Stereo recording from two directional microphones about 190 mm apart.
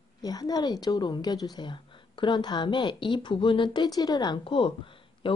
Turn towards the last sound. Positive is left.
turn(degrees=25)  # may be behind; listen again after turning